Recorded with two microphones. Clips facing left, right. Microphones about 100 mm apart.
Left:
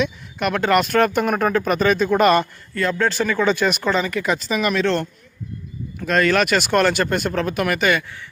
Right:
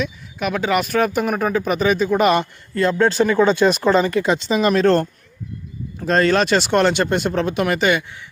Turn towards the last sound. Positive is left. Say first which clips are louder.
# right 1 dB
turn(degrees=-25)  # may be behind; listen again after turning